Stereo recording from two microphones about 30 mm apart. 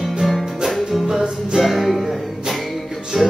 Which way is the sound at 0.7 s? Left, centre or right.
Centre.